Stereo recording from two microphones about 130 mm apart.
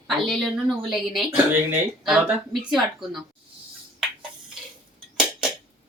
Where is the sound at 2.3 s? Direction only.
Centre (ahead or behind).